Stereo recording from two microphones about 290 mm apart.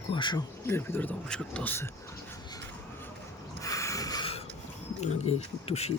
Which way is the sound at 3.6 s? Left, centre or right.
Centre.